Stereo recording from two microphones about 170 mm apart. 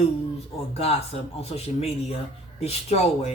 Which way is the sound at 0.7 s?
35° left (ahead or behind).